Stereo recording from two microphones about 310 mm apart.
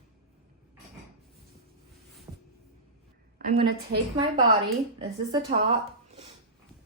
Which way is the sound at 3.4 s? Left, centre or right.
Right.